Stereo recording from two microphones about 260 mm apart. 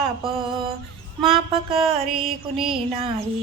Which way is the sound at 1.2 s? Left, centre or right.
Centre.